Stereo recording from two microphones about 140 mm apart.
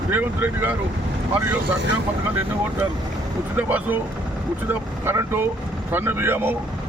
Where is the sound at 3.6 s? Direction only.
10° right (ahead or behind).